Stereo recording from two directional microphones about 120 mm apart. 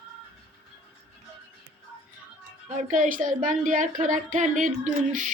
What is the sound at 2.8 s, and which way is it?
Speech, 90° right.